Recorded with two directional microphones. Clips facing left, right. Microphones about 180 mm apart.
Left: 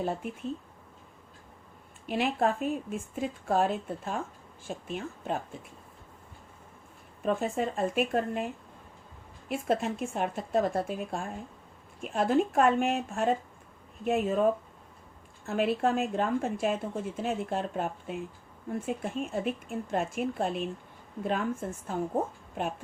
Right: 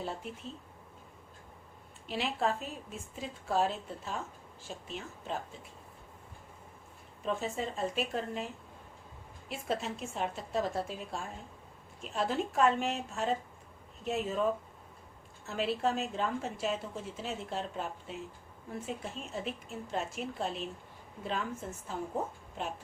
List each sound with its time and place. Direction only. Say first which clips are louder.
0.0 s a woman's voice: left 7 dB; 55° left (ahead or behind)
2.0 s a woman's voice: left 5 dB; 55° left (ahead or behind)
7.2 s a woman's voice: left 6 dB; 55° left (ahead or behind)
15.4 s a woman's voice: left 5 dB; 55° left (ahead or behind)